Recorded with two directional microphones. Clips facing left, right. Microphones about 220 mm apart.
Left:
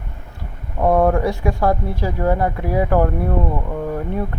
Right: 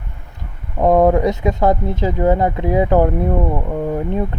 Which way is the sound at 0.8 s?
20° right (ahead or behind).